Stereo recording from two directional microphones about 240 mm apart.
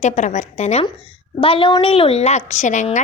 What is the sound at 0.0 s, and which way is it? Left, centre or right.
A woman's voice, left.